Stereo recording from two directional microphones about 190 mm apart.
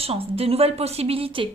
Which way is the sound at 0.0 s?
30° right (ahead or behind).